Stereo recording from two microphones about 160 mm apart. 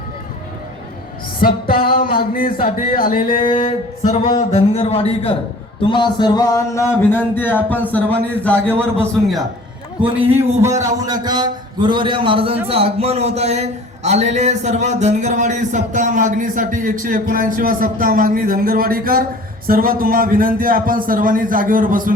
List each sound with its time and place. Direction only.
1.4 s speech: 65° left (ahead or behind)
3.6 s speech: 45° left (ahead or behind)
5.9 s music: 30° left (ahead or behind)
7.0 s a man's voice: 15° left (ahead or behind)
10.2 s a man's voice: 15° right (ahead or behind); by 22.1 s 60° right (ahead or behind)